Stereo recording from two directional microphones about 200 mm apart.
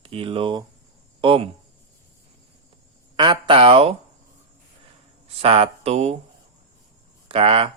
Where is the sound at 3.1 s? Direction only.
25° right (ahead or behind).